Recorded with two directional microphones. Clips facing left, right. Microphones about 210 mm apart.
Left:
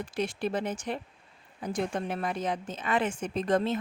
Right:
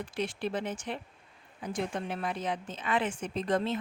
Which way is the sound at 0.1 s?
45° left (ahead or behind).